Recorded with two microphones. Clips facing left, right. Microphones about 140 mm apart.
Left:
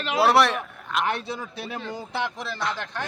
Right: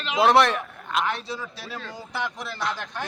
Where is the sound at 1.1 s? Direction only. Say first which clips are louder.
Left 2 dB; 55° left (ahead or behind).